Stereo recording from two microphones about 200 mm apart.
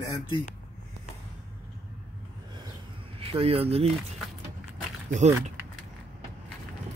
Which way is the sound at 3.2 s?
30° right (ahead or behind).